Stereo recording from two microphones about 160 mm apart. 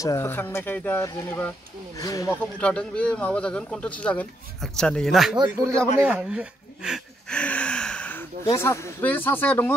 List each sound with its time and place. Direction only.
0.0 s speech: 15° left (ahead or behind)
2.6 s a man's voice: 5° left (ahead or behind)
7.3 s gasp: 5° left (ahead or behind)
8.5 s speech: 15° left (ahead or behind)